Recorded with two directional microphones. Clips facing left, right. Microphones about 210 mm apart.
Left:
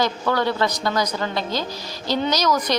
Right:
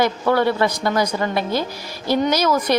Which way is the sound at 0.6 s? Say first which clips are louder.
Right 3 dB; 25° right (ahead or behind).